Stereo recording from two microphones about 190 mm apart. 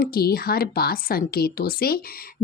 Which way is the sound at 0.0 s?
55° left (ahead or behind).